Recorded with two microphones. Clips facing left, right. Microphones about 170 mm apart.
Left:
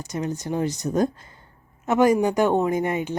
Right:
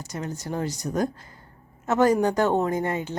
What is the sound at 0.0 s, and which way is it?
A woman's voice, 20° left (ahead or behind).